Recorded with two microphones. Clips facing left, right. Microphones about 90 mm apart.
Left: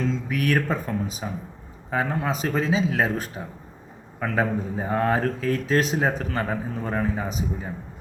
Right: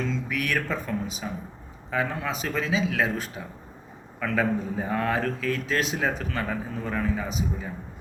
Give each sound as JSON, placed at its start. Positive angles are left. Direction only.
{"t": 0.1, "sound": "speech", "side_deg": 40}